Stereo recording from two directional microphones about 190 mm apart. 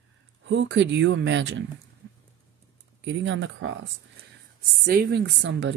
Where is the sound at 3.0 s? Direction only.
75° right (ahead or behind).